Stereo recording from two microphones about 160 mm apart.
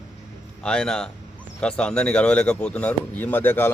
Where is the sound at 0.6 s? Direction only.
5° left (ahead or behind).